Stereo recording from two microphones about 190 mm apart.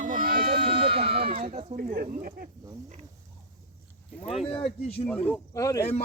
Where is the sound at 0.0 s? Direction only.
45° right (ahead or behind).